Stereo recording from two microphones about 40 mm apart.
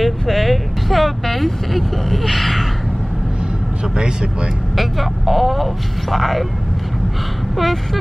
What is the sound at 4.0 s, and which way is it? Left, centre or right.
Speech, right.